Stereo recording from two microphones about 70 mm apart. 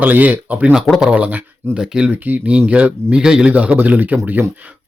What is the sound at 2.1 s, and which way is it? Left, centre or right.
Speech, right.